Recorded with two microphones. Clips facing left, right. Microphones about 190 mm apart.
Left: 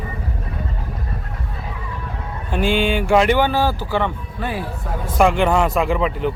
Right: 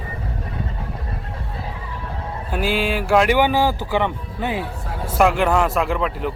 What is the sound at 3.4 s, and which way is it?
A man's voice, 15° right (ahead or behind).